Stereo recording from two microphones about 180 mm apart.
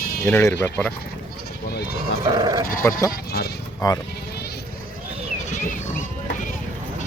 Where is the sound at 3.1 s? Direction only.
60° left (ahead or behind).